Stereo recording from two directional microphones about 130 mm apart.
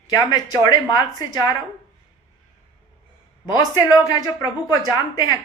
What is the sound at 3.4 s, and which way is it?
Speech, 30° left (ahead or behind).